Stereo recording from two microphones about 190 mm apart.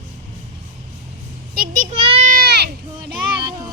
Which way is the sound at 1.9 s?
30° right (ahead or behind).